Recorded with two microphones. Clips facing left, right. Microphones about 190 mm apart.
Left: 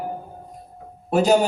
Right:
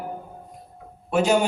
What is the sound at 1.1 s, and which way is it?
Speech, 40° left (ahead or behind).